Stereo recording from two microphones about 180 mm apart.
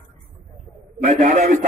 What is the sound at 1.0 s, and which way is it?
Speech, 40° right (ahead or behind).